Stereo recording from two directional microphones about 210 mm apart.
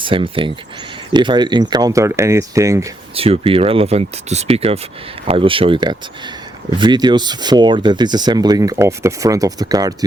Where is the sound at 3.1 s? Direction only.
25° right (ahead or behind).